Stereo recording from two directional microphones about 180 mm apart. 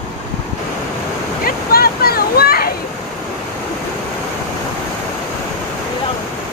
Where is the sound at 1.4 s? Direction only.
55° left (ahead or behind).